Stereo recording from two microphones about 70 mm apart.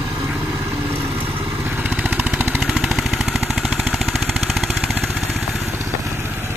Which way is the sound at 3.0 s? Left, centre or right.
Centre.